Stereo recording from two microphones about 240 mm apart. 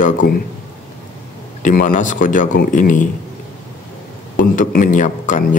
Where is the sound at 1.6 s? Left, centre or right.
Left.